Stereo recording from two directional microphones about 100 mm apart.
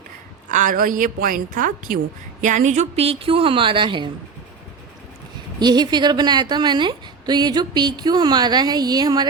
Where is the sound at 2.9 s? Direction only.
70° right (ahead or behind); by 4.1 s 55° right (ahead or behind).